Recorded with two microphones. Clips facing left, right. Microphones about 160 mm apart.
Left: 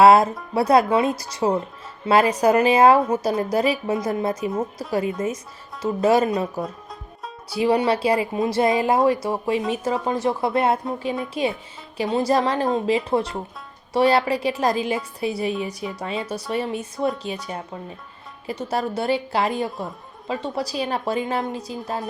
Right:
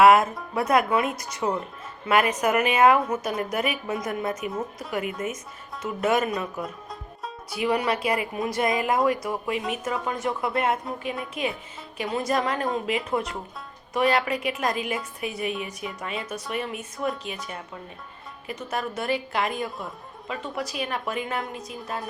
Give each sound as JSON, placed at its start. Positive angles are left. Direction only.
{"t": 0.0, "sound": "a woman's voice", "side_deg": 35}